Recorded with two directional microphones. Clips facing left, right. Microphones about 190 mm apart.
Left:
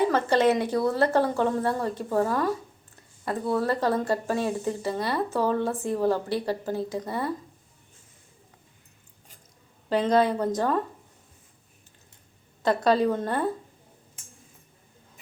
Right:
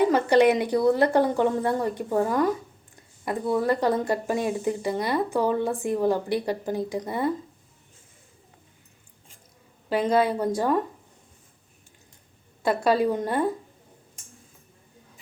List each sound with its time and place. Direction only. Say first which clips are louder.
0.0 s speech: right 3 dB; 15° right (ahead or behind)
9.9 s speech: even; 10° right (ahead or behind)
12.6 s speech: even; 10° right (ahead or behind)